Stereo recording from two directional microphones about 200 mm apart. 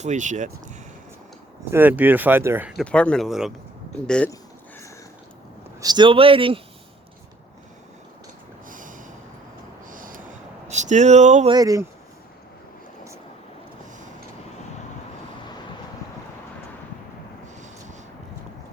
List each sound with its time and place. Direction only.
0.0 s speech: 40° right (ahead or behind)
1.7 s speech: 10° right (ahead or behind)
2.8 s speech: 5° left (ahead or behind)
5.8 s speech: 20° right (ahead or behind)
8.7 s snort: 40° right (ahead or behind)
9.9 s a sound: 45° right (ahead or behind)
10.7 s speech: 35° right (ahead or behind)
11.5 s speech: 15° right (ahead or behind)